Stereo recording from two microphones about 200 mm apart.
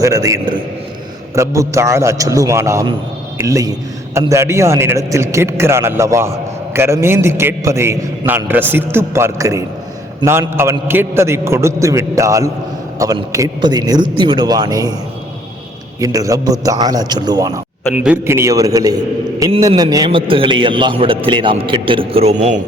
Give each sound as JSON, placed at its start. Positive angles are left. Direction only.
{"t": 0.0, "sound": "a man's voice", "side_deg": -15}
{"t": 16.0, "sound": "a man's voice", "side_deg": -15}
{"t": 17.9, "sound": "a man's voice", "side_deg": -10}